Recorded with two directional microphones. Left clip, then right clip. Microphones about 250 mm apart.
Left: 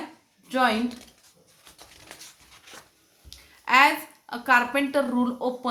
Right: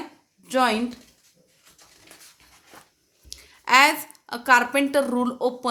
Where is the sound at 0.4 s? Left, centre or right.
Right.